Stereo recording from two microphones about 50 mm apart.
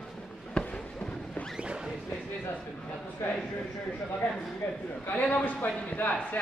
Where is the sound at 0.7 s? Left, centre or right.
Centre.